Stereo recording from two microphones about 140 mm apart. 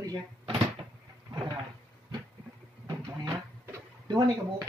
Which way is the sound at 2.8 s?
30° right (ahead or behind).